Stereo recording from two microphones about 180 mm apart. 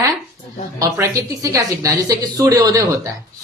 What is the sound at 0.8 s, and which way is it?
A woman's voice, 20° right (ahead or behind).